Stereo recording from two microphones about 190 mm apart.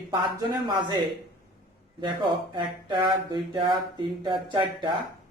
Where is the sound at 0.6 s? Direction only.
25° right (ahead or behind).